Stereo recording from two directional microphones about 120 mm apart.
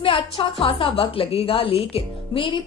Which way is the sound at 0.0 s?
45° left (ahead or behind).